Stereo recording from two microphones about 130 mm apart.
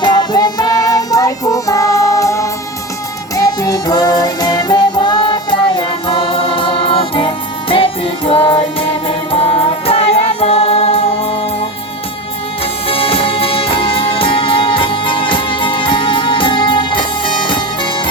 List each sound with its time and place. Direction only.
0.0 s music: 35° left (ahead or behind)
12.9 s music: 45° left (ahead or behind)